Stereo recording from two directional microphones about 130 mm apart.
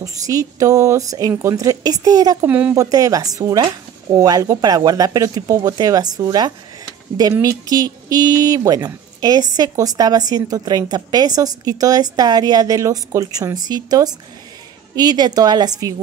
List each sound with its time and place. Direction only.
0.0 s a woman's voice: 25° right (ahead or behind)
2.4 s speech: 10° right (ahead or behind)
2.7 s a woman's voice: 25° right (ahead or behind)